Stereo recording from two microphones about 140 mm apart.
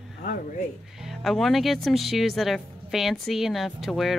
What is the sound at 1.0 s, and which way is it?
Speech, centre (ahead or behind).